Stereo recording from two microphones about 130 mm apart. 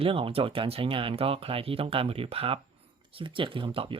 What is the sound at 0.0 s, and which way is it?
Speech, 45° right (ahead or behind).